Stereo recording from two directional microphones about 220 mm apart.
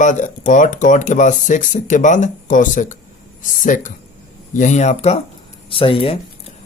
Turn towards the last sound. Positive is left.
turn(degrees=25)  # may be behind; listen again after turning